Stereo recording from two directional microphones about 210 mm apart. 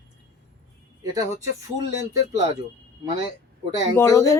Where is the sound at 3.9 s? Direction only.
15° left (ahead or behind).